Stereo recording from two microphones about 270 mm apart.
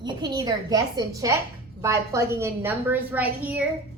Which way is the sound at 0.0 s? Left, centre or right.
Centre.